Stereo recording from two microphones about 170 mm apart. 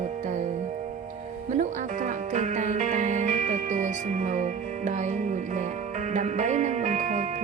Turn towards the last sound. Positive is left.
turn(degrees=-50)  # may be behind; listen again after turning